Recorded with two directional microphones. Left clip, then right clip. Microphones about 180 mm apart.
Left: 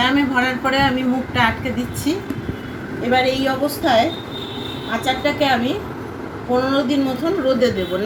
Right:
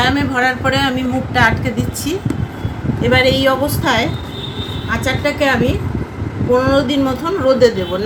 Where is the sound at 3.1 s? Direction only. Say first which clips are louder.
Right 5 dB; 60° right (ahead or behind).